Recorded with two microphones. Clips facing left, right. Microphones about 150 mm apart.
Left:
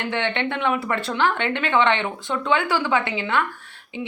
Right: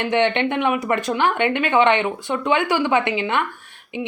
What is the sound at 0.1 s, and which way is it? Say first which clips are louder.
A woman's voice: right 7 dB; 20° right (ahead or behind).